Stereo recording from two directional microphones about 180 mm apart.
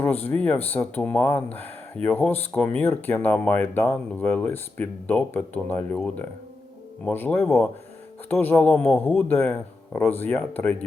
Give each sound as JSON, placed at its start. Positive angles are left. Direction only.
{"t": 0.0, "sound": "speech", "side_deg": 10}
{"t": 7.0, "sound": "speech", "side_deg": 10}